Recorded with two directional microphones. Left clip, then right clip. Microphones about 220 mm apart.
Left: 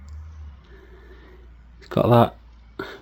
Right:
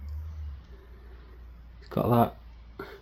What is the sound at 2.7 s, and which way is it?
Cough, 50° left (ahead or behind).